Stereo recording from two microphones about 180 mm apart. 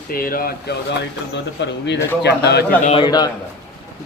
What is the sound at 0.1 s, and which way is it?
Speech, 55° left (ahead or behind).